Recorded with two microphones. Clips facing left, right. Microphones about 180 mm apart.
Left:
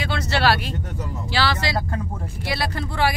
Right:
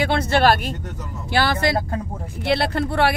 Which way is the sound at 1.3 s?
55° right (ahead or behind).